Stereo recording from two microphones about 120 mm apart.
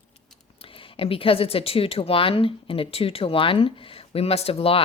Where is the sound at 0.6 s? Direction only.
50° left (ahead or behind).